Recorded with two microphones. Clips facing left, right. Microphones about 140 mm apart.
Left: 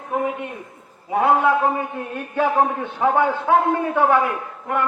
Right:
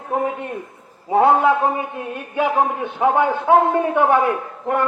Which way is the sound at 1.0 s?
30° right (ahead or behind).